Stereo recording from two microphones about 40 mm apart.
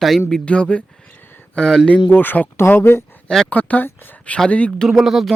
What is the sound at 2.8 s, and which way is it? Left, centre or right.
Speech, left.